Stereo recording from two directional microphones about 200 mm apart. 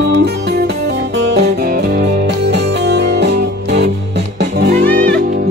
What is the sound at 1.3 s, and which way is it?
Music, 55° right (ahead or behind).